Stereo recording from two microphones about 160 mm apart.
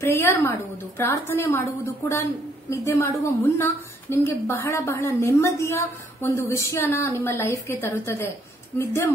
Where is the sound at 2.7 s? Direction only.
20° left (ahead or behind).